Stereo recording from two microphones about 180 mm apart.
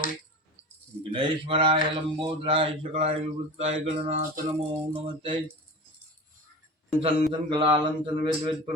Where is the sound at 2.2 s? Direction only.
30° right (ahead or behind).